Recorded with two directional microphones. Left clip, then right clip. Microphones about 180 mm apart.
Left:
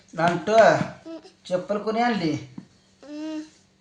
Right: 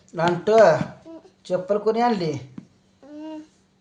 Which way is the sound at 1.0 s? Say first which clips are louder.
Left 3 dB; 20° right (ahead or behind).